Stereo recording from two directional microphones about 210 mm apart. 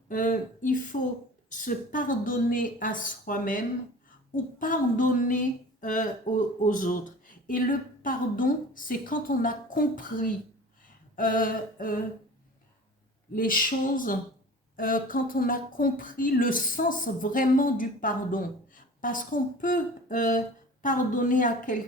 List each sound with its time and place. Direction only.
0.1 s speech: 40° left (ahead or behind)
4.6 s speech: 40° left (ahead or behind)
13.3 s speech: 40° left (ahead or behind)